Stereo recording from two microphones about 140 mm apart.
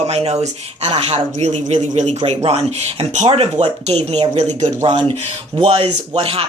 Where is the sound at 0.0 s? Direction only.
50° right (ahead or behind).